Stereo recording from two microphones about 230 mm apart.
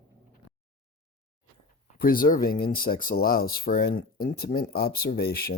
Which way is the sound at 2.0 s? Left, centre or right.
Left.